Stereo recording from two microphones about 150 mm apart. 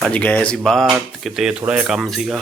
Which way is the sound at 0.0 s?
10° left (ahead or behind).